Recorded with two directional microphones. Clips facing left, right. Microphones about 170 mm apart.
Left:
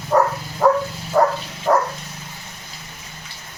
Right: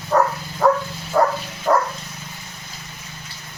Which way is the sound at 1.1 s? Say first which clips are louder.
Left 1 dB; 5° left (ahead or behind).